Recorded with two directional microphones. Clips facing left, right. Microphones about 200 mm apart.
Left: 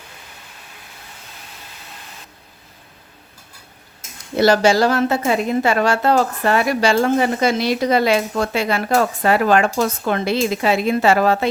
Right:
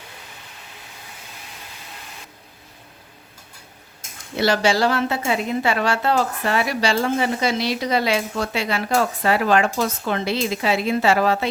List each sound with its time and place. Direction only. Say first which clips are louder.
4.4 s a woman's voice: left 5 dB; 45° left (ahead or behind)